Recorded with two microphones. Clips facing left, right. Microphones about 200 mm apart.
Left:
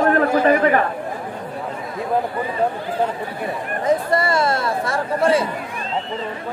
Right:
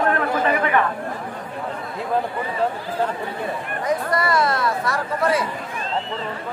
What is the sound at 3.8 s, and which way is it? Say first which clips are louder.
Speech: left 4 dB; 25° left (ahead or behind).